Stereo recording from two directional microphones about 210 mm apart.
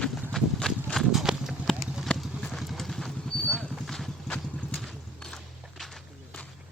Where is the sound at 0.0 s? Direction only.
5° left (ahead or behind).